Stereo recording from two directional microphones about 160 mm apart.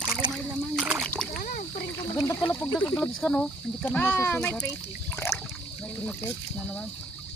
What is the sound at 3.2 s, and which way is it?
Speech, 5° left (ahead or behind).